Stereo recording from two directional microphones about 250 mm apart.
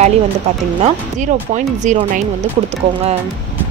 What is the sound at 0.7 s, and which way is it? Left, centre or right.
Speech, right.